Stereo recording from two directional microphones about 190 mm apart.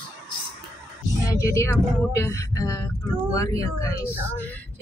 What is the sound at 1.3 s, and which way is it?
A woman's voice, 15° left (ahead or behind).